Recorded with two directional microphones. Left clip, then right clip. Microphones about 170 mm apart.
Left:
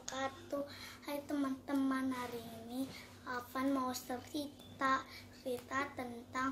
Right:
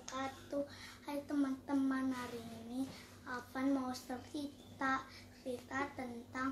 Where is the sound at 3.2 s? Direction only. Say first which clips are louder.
Left 2 dB; 10° right (ahead or behind).